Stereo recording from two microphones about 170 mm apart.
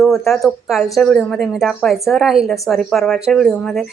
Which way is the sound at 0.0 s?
Centre (ahead or behind).